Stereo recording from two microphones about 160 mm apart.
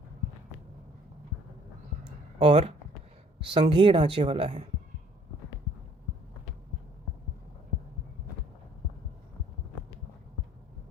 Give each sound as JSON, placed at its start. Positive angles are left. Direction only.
{"t": 2.4, "sound": "speech", "side_deg": -35}